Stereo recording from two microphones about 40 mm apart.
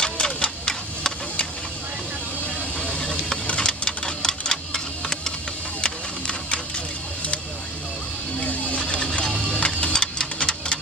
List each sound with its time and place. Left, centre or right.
0.0 s printer: centre
2.4 s vehicle: left
3.6 s a sound: centre
5.8 s printer: left
8.4 s vehicle: left
9.2 s music: centre
9.6 s music: left
9.9 s a sound: centre